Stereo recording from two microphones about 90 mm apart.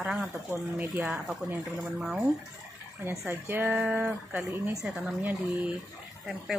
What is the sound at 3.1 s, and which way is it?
Speech, 25° right (ahead or behind).